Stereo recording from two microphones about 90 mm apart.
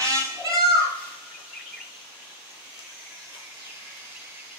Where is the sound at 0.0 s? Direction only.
35° right (ahead or behind).